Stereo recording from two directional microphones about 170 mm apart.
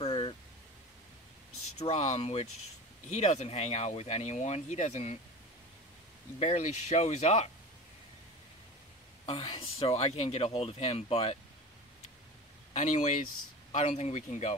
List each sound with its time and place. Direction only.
0.0 s a sound: 35° left (ahead or behind)
1.8 s speech: 40° left (ahead or behind)
6.4 s speech: 40° left (ahead or behind)
9.2 s speech: 35° left (ahead or behind)
12.7 s speech: 45° left (ahead or behind)